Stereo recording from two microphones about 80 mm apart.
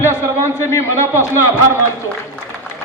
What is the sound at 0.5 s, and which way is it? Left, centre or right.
Speech, left.